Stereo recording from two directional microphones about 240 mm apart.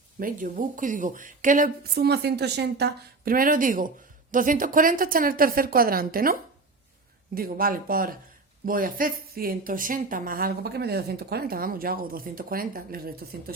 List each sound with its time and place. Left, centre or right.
0.2 s a woman's voice: right
7.3 s a woman's voice: right